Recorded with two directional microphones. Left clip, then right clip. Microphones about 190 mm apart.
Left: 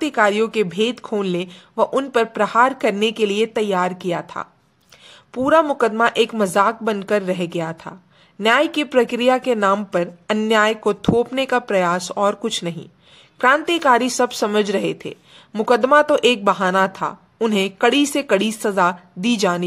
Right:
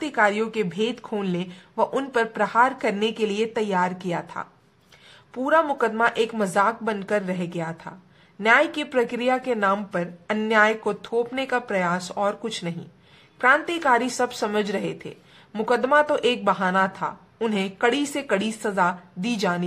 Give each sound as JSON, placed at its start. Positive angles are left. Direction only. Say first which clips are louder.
{"t": 0.0, "sound": "speech", "louder": "left 5 dB", "side_deg": 30}